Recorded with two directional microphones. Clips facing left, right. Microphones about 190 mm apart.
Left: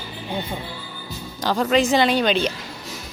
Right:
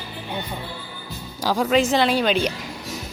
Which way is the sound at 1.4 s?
10° right (ahead or behind).